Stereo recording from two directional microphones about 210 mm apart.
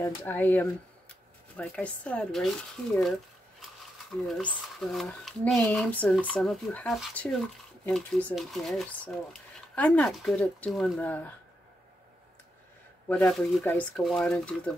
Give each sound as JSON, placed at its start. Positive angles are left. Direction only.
{"t": 0.0, "sound": "speech", "side_deg": 10}
{"t": 13.1, "sound": "speech", "side_deg": 5}